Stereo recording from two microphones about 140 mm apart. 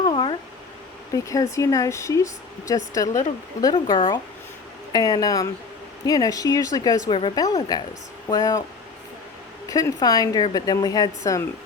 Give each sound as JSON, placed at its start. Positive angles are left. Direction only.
{"t": 0.0, "sound": "a sound", "side_deg": 35}
{"t": 1.1, "sound": "speech", "side_deg": 25}
{"t": 7.1, "sound": "a woman's voice", "side_deg": 35}
{"t": 9.6, "sound": "speech", "side_deg": 25}